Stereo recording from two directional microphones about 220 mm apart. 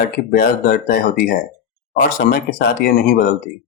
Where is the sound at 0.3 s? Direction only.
45° left (ahead or behind).